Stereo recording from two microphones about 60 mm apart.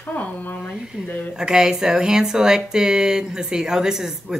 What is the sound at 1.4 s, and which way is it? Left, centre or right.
Speech, centre.